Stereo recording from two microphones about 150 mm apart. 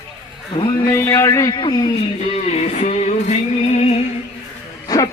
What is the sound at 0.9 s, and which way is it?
A man's voice, 20° left (ahead or behind).